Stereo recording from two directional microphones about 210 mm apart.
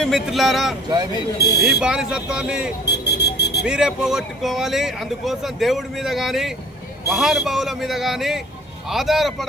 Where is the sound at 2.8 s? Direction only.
50° left (ahead or behind).